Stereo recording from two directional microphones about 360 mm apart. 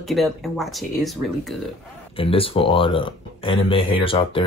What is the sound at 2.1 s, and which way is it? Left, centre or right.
Speech, centre.